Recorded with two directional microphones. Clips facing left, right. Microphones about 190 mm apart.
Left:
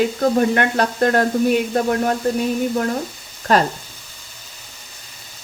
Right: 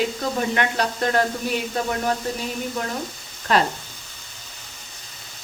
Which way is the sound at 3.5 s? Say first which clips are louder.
Left 4 dB; 40° left (ahead or behind).